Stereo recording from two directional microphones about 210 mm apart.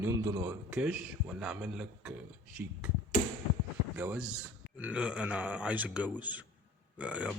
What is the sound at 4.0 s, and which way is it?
A man's voice, 5° right (ahead or behind).